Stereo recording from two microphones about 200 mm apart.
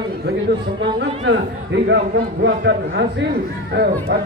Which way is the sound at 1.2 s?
60° right (ahead or behind).